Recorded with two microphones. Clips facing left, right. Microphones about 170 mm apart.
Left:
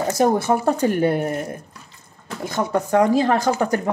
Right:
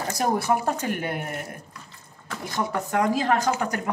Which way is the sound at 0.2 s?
25° left (ahead or behind).